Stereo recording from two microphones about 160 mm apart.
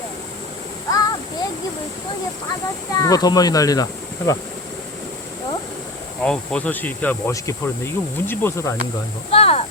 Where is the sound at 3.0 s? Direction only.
25° left (ahead or behind).